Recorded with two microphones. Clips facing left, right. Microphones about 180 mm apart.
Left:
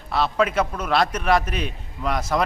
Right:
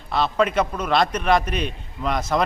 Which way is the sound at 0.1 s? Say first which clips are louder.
Right 1 dB; 5° left (ahead or behind).